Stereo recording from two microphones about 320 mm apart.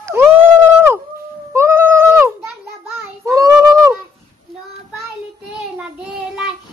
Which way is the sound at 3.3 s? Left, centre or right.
Centre.